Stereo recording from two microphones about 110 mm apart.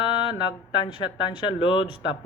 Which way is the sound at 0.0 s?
45° left (ahead or behind).